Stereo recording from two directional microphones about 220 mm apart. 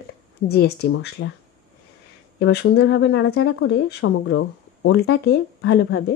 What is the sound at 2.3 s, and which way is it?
Speech, 50° left (ahead or behind).